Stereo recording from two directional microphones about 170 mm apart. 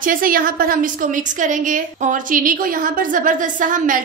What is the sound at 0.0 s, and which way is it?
A woman's voice, 55° right (ahead or behind).